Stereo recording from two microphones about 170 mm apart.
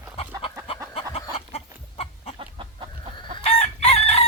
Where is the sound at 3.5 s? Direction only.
40° left (ahead or behind).